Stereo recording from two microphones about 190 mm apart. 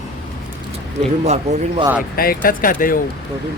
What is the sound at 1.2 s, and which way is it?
Speech, 35° right (ahead or behind).